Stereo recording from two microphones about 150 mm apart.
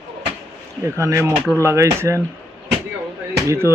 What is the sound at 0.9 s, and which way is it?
Speech, 20° right (ahead or behind).